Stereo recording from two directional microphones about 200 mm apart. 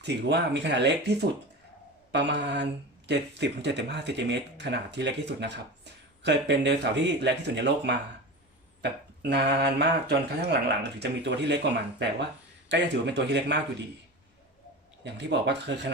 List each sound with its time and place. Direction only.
0.0 s speech: 60° right (ahead or behind)
15.0 s speech: 60° right (ahead or behind)